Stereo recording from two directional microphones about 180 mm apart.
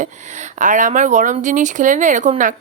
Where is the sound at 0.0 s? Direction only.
45° right (ahead or behind).